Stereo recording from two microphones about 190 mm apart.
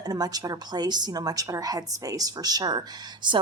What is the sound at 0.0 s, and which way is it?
A woman's voice, 20° right (ahead or behind).